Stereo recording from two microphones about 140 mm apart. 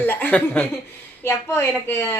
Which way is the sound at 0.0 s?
15° left (ahead or behind).